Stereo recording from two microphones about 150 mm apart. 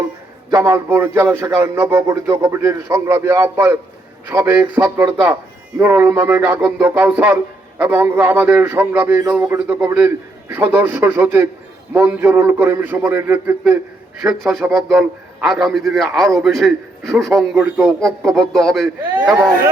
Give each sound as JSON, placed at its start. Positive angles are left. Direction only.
{"t": 0.5, "sound": "a man's voice", "side_deg": -15}
{"t": 14.2, "sound": "a man's voice", "side_deg": 0}